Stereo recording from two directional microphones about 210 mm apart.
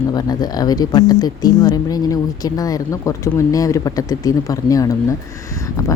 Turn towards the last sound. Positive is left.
turn(degrees=15)  # may be behind; listen again after turning